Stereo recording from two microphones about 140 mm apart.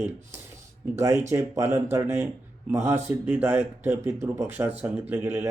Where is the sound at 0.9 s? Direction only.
20° right (ahead or behind).